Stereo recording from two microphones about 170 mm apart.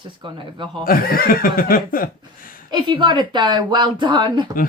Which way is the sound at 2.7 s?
30° right (ahead or behind).